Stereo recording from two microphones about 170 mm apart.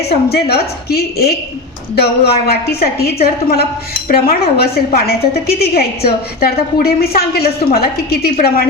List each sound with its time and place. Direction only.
0.0 s a woman's voice: 70° left (ahead or behind)